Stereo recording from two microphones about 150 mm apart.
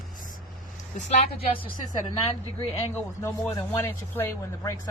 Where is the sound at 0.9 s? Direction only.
45° left (ahead or behind).